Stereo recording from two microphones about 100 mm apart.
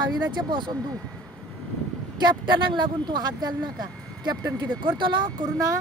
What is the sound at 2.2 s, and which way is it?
Speech, 50° right (ahead or behind).